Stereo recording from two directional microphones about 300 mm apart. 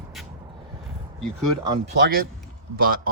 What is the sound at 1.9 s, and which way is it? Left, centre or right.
Speech, right.